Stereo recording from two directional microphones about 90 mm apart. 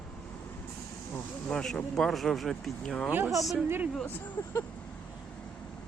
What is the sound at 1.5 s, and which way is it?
Speech, 10° left (ahead or behind).